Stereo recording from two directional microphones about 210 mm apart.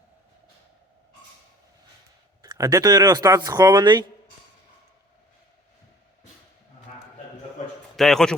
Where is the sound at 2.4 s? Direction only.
15° right (ahead or behind).